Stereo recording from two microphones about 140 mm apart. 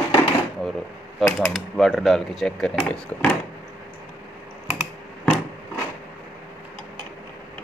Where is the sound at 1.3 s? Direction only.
Centre (ahead or behind).